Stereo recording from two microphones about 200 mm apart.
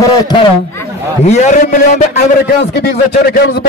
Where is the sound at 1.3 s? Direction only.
35° left (ahead or behind).